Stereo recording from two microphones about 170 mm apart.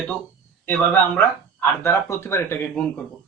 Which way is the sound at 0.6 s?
10° left (ahead or behind).